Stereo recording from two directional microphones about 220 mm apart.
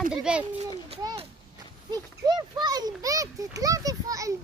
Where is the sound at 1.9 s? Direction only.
20° right (ahead or behind).